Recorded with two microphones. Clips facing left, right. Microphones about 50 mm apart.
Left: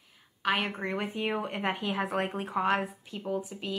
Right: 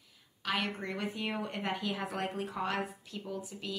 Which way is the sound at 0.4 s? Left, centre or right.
Left.